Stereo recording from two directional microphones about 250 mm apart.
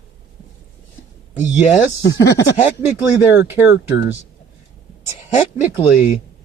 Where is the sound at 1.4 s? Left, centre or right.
Centre.